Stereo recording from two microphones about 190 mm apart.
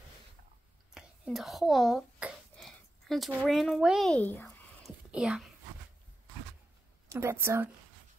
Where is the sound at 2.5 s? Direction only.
Centre (ahead or behind).